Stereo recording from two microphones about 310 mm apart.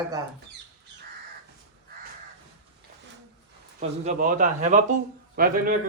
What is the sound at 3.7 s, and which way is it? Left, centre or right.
Speech, right.